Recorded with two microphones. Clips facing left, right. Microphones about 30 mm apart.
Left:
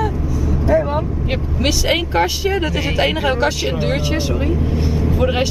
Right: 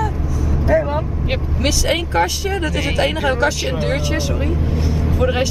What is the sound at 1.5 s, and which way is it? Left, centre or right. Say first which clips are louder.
Speech: left 2 dB; centre.